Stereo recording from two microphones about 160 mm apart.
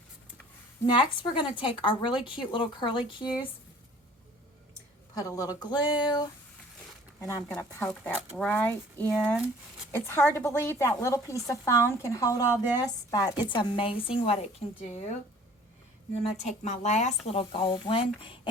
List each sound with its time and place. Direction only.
0.9 s speech: 30° left (ahead or behind)
5.1 s a woman's voice: 20° left (ahead or behind)
9.1 s speech: centre (ahead or behind)
9.9 s a woman's voice: 15° left (ahead or behind); by 14.8 s 40° left (ahead or behind)
16.2 s speech: 45° left (ahead or behind)